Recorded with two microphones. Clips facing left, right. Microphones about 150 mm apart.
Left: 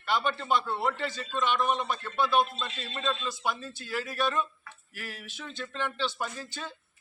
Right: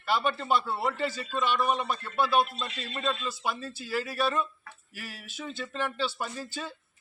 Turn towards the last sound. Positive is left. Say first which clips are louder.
# right 1 dB
turn(degrees=-10)  # may be behind; listen again after turning